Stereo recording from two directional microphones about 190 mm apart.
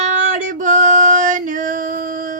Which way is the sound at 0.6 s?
40° right (ahead or behind).